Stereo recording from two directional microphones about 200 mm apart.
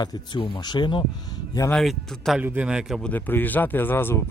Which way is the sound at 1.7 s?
Centre (ahead or behind).